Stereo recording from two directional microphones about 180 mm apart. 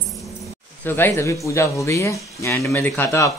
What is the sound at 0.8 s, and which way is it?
Speech, 10° left (ahead or behind).